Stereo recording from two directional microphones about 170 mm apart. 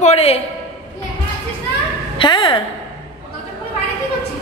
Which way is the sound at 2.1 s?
30° left (ahead or behind).